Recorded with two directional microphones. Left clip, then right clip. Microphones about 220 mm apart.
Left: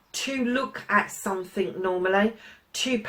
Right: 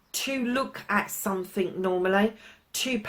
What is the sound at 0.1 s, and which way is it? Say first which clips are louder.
Speech: left 1 dB; 45° right (ahead or behind).